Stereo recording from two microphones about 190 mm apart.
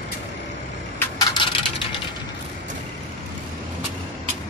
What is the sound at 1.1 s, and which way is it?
Coin, 25° left (ahead or behind).